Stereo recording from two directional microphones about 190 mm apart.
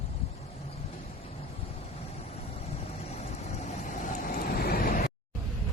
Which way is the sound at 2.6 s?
35° left (ahead or behind).